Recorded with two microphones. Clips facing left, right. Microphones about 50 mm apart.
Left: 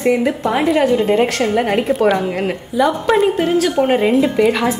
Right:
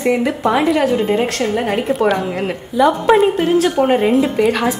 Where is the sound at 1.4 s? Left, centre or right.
Centre.